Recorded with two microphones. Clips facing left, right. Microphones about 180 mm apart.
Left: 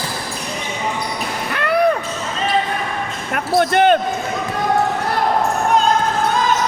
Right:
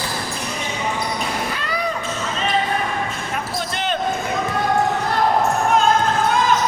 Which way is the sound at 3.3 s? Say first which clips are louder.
Left 9 dB; 60° left (ahead or behind).